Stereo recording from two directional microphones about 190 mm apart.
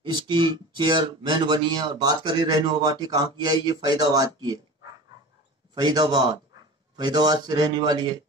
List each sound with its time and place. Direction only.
0.0 s speech: 25° right (ahead or behind)
5.8 s speech: 20° right (ahead or behind)